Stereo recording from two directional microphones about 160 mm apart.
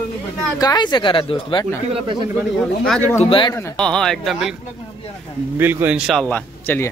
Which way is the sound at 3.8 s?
5° left (ahead or behind).